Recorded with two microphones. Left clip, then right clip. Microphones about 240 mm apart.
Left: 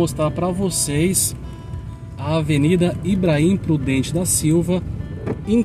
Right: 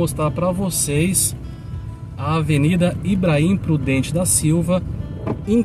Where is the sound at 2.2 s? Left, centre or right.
Right.